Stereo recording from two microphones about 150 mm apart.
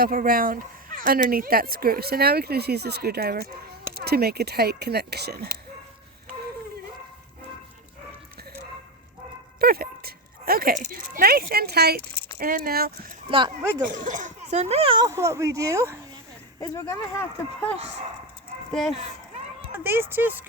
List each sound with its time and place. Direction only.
0.0 s speech: 75° right (ahead or behind); by 5.5 s 90° right
9.6 s speech: 90° right
12.4 s speech: 70° right (ahead or behind); by 13.1 s 85° right
14.0 s speech: 55° right (ahead or behind); by 15.1 s 35° right (ahead or behind)
15.1 s speech: 20° right (ahead or behind)
16.6 s speech: 20° left (ahead or behind)
18.7 s speech: centre (ahead or behind)
19.7 s speech: 15° right (ahead or behind)